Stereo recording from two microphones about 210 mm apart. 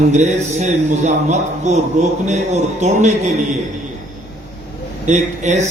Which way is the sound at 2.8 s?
35° right (ahead or behind).